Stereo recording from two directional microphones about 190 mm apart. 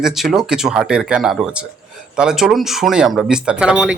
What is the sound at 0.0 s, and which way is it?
Speech, centre (ahead or behind).